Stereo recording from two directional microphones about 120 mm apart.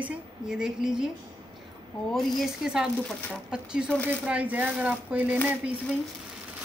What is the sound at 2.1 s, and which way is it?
Speech, centre (ahead or behind).